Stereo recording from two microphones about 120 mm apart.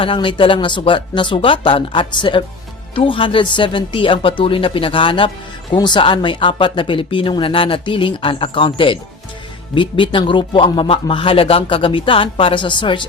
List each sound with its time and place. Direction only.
0.0 s a man's voice: 45° left (ahead or behind)